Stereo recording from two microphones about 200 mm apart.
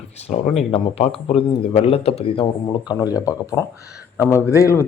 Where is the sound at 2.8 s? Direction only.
20° left (ahead or behind).